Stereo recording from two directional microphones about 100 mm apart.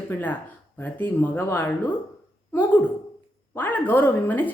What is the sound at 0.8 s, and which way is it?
Speech, 20° left (ahead or behind).